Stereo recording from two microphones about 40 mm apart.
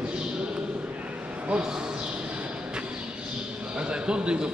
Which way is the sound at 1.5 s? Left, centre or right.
Right.